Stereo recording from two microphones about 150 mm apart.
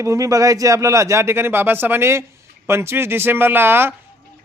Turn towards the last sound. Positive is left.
turn(degrees=-15)  # may be behind; listen again after turning